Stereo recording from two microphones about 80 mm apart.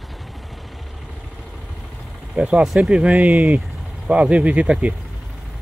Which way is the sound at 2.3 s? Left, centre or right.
Centre.